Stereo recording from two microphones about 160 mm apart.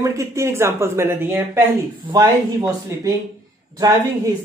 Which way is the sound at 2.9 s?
15° right (ahead or behind).